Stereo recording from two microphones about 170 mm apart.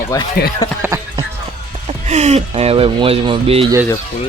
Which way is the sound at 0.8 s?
20° right (ahead or behind).